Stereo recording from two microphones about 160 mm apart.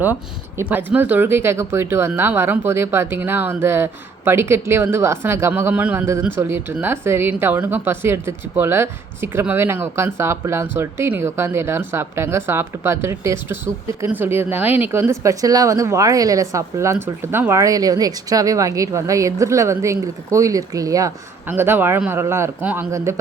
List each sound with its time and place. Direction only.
0.0 s a woman's voice: 10° right (ahead or behind)